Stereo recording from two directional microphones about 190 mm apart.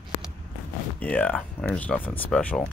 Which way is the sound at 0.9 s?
5° left (ahead or behind).